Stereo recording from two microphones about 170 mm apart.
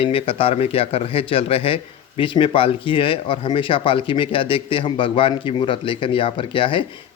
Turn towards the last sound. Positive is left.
turn(degrees=30)  # may be behind; listen again after turning